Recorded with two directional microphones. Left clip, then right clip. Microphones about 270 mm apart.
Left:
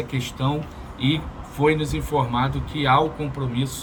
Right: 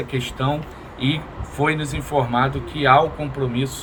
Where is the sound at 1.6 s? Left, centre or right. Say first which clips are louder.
Left 1 dB; centre.